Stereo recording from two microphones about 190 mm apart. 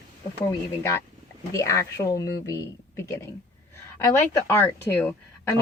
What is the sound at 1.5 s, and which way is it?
Speech, 15° left (ahead or behind).